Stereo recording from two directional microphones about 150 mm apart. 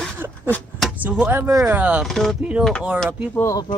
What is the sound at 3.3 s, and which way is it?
Speech, 20° left (ahead or behind).